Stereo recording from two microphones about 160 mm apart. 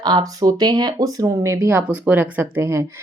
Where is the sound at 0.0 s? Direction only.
25° right (ahead or behind).